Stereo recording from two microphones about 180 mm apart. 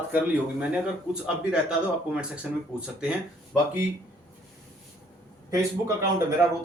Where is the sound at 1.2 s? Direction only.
5° right (ahead or behind).